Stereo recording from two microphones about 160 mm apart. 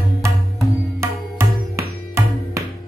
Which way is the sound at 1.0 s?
15° right (ahead or behind).